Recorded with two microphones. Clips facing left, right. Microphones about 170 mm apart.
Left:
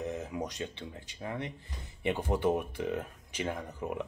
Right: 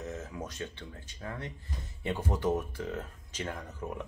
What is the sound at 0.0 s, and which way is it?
Speech, 15° left (ahead or behind).